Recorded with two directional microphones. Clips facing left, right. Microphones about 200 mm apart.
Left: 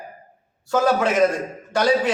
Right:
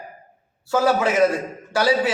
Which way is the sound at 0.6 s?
5° right (ahead or behind).